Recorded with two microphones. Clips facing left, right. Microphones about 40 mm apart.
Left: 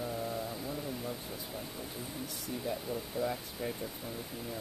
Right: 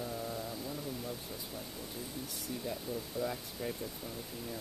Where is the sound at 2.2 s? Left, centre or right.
Centre.